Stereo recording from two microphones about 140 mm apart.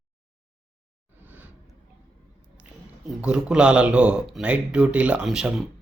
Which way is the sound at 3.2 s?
5° right (ahead or behind).